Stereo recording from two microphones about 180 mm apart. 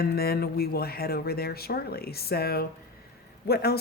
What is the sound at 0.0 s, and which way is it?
Speech, 60° left (ahead or behind).